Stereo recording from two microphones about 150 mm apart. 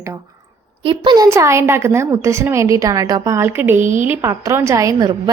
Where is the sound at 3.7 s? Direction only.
55° right (ahead or behind).